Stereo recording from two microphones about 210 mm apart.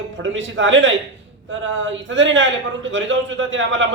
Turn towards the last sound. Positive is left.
turn(degrees=-65)  # may be behind; listen again after turning